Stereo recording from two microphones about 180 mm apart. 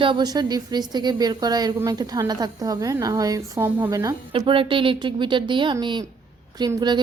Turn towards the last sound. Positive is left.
turn(degrees=-25)  # may be behind; listen again after turning